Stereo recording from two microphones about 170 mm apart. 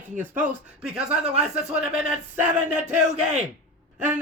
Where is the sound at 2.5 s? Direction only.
45° right (ahead or behind).